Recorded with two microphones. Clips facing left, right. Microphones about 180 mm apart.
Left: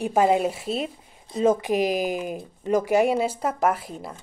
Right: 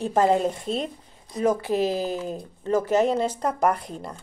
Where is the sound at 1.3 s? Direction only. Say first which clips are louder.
Left 2 dB; 25° left (ahead or behind).